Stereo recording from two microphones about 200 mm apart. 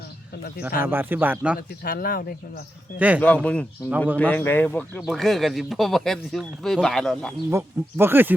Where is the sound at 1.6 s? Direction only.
45° left (ahead or behind).